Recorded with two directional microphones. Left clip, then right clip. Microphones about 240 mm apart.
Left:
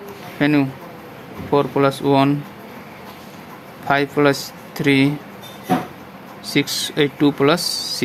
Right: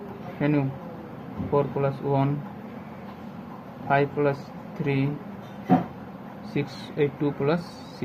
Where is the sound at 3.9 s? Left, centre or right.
Left.